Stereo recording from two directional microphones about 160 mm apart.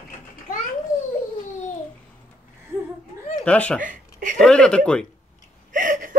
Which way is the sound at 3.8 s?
55° right (ahead or behind).